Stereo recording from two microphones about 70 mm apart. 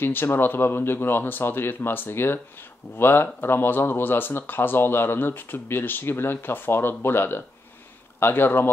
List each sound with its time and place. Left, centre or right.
0.0 s speech: left